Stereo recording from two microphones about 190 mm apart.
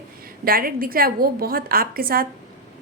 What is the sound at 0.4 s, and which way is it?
A woman's voice, 50° right (ahead or behind).